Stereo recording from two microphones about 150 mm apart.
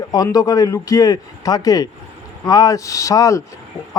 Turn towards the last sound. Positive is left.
turn(degrees=20)  # may be behind; listen again after turning